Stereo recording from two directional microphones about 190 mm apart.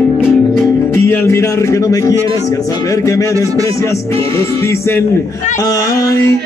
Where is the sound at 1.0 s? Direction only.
15° left (ahead or behind).